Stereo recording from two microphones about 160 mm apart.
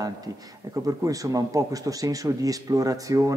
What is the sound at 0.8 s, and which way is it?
A man's voice, 20° right (ahead or behind).